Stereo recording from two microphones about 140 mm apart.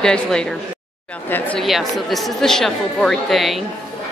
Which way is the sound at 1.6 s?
Centre (ahead or behind).